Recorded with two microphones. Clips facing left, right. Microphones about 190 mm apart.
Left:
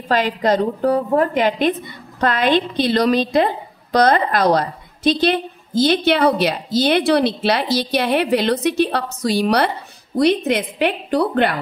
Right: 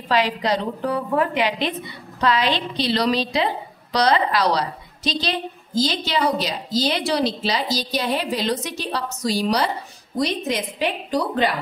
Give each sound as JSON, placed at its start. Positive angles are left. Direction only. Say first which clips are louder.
{"t": 0.1, "sound": "a woman's voice", "louder": "left 3 dB", "side_deg": 50}